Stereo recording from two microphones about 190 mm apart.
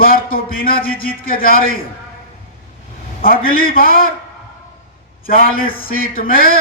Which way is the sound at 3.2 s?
50° left (ahead or behind).